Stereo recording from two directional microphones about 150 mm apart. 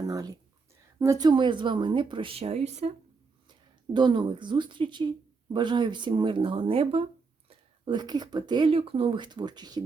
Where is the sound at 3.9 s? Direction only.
30° right (ahead or behind).